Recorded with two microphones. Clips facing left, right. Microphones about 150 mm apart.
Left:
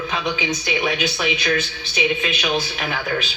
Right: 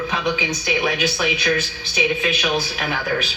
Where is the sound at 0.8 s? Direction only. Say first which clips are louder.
Right 1 dB; 5° right (ahead or behind).